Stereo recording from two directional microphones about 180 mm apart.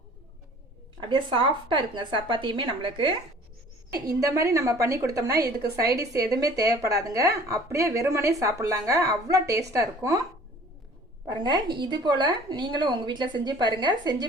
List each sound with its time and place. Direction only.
0.9 s a woman's voice: 30° right (ahead or behind)
11.3 s a woman's voice: 25° right (ahead or behind)